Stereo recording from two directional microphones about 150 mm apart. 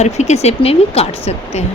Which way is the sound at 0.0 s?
50° left (ahead or behind).